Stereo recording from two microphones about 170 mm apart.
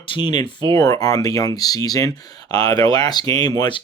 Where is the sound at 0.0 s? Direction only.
30° left (ahead or behind).